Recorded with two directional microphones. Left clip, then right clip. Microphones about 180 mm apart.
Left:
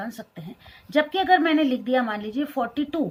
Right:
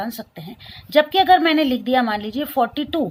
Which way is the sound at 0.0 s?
45° right (ahead or behind).